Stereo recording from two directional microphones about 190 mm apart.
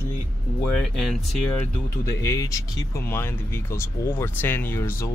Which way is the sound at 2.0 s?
15° left (ahead or behind).